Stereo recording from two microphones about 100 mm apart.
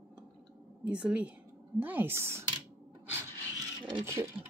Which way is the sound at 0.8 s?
10° right (ahead or behind).